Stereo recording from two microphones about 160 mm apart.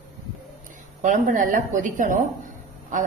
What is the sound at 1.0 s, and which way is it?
A woman's voice, 55° right (ahead or behind).